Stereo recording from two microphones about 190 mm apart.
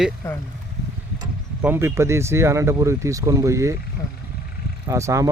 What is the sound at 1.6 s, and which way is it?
Speech, 10° right (ahead or behind).